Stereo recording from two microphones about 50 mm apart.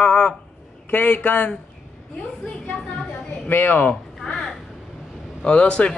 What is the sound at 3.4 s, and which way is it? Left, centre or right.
Speech, left.